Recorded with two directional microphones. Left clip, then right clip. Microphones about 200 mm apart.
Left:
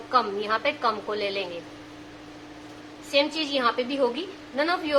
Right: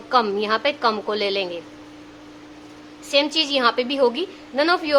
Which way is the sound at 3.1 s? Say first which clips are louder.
Right 5 dB; 50° right (ahead or behind).